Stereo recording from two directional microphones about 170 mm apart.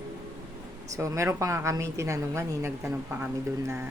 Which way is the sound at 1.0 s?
15° right (ahead or behind).